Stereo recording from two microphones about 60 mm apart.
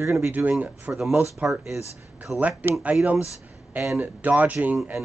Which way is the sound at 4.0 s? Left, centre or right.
Right.